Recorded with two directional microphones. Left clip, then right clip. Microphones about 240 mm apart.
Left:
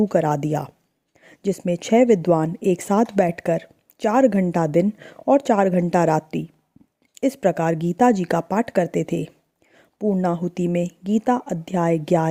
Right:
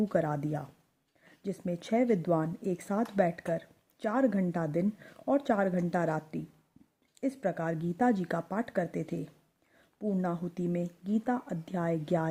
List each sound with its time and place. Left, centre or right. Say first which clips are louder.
0.1 s speech: left 11 dB; left